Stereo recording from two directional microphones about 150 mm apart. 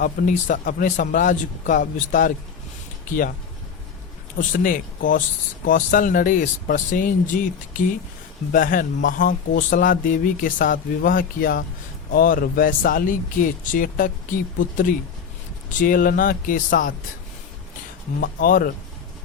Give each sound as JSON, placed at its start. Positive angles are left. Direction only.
{"t": 0.0, "sound": "speech", "side_deg": 60}
{"t": 4.4, "sound": "speech", "side_deg": 65}
{"t": 8.5, "sound": "speech", "side_deg": 65}
{"t": 18.2, "sound": "speech", "side_deg": 70}